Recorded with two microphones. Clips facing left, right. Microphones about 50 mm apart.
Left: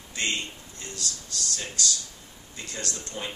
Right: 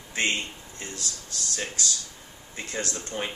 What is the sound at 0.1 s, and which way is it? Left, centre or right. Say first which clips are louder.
Speech: right 3 dB; right.